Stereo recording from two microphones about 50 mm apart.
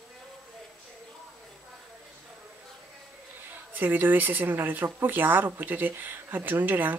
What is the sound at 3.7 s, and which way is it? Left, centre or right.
Speech, right.